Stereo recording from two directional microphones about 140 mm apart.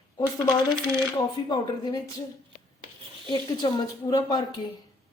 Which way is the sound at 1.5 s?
30° left (ahead or behind).